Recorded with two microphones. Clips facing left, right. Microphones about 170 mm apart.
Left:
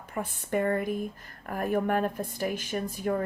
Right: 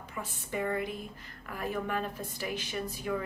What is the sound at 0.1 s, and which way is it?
Speech, 55° left (ahead or behind).